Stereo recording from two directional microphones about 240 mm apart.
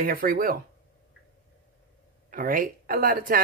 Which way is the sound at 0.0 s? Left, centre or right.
Right.